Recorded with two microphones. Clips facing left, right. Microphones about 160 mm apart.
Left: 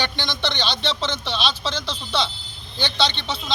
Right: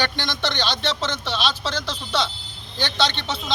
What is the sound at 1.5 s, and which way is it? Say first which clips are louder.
Speech: even; 15° left (ahead or behind).